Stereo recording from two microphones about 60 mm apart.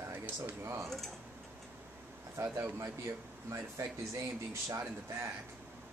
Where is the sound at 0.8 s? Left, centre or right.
Centre.